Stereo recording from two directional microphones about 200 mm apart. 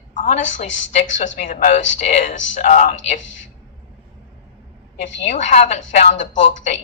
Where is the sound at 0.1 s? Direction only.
40° left (ahead or behind).